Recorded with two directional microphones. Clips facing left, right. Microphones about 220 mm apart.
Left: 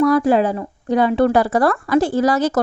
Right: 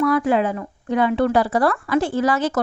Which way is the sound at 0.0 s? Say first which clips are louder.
Left 4 dB; 40° left (ahead or behind).